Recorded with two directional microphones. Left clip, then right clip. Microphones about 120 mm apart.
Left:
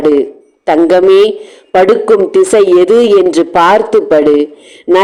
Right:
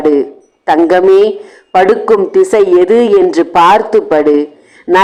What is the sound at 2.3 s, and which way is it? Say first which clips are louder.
A man's voice: left 1 dB; 20° left (ahead or behind).